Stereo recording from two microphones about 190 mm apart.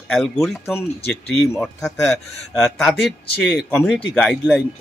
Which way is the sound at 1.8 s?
15° left (ahead or behind).